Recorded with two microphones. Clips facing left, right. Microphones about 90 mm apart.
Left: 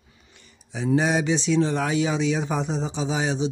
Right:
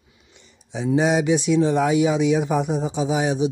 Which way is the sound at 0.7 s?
15° right (ahead or behind).